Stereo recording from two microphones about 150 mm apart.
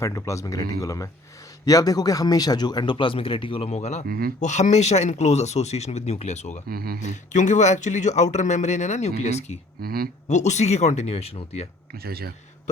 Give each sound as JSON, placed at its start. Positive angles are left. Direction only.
{"t": 0.0, "sound": "speech", "side_deg": 20}
{"t": 4.0, "sound": "speech", "side_deg": -80}
{"t": 4.4, "sound": "speech", "side_deg": 50}
{"t": 6.7, "sound": "speech", "side_deg": -85}
{"t": 7.0, "sound": "speech", "side_deg": 55}
{"t": 9.8, "sound": "speech", "side_deg": -90}
{"t": 10.2, "sound": "speech", "side_deg": 50}
{"t": 12.0, "sound": "speech", "side_deg": -90}